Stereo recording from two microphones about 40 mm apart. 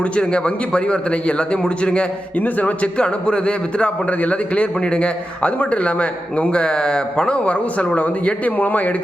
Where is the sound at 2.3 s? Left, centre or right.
Left.